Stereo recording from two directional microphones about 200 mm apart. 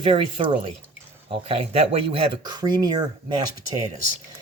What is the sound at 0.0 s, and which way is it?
Speech, 25° right (ahead or behind).